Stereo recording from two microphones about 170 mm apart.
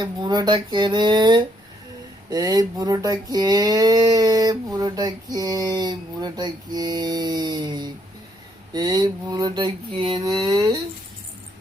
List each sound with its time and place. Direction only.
0.0 s speech: 25° right (ahead or behind)